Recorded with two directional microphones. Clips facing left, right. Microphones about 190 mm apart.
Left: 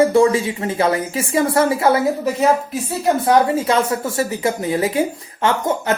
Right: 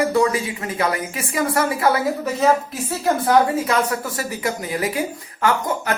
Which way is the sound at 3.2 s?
25° left (ahead or behind).